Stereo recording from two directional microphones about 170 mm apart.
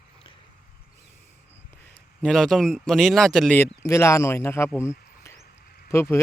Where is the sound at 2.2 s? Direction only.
Centre (ahead or behind).